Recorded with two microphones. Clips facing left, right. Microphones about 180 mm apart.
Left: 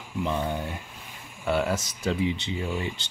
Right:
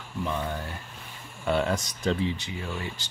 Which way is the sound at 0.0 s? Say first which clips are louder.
Left 3 dB; 15° left (ahead or behind).